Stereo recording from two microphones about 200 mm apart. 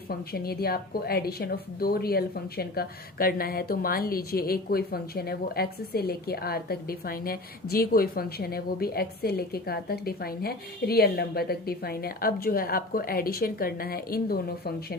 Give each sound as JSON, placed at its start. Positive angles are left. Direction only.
{"t": 0.1, "sound": "a woman's voice", "side_deg": 50}